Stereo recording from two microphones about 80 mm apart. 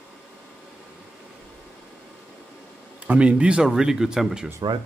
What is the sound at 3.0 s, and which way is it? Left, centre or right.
Speech, centre.